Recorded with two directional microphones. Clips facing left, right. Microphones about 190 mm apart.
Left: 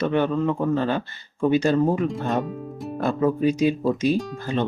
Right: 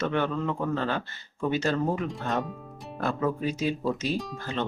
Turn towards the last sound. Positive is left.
turn(degrees=15)  # may be behind; listen again after turning